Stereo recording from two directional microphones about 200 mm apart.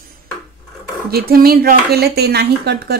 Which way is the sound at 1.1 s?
50° right (ahead or behind).